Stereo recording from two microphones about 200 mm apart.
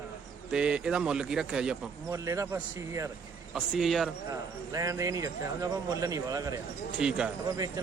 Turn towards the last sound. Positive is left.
turn(degrees=-20)  # may be behind; listen again after turning